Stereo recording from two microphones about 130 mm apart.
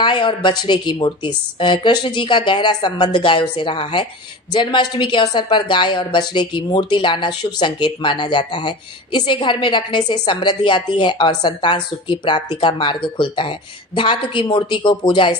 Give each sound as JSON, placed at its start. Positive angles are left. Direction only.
{"t": 0.0, "sound": "a woman's voice", "side_deg": 35}